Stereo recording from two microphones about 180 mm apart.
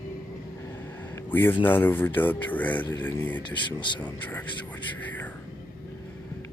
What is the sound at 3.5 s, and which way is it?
Speech, 25° left (ahead or behind).